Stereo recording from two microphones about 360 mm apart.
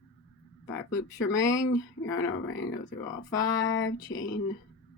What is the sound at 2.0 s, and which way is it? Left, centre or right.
Speech, left.